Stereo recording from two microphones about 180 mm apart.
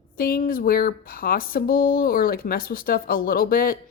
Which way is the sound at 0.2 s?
55° left (ahead or behind).